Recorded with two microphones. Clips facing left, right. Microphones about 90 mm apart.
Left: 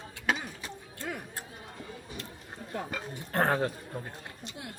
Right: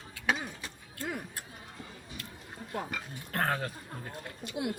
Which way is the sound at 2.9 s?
25° left (ahead or behind).